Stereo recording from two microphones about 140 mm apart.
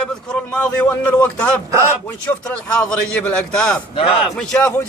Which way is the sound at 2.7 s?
10° left (ahead or behind).